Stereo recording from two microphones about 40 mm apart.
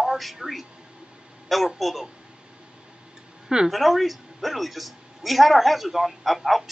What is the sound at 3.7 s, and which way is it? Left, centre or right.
Speech, centre.